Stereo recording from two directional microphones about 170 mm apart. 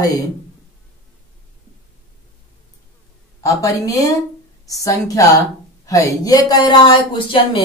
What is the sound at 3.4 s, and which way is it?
Speech, 20° left (ahead or behind).